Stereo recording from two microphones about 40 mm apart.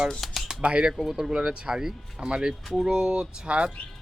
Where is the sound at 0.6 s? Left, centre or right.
Right.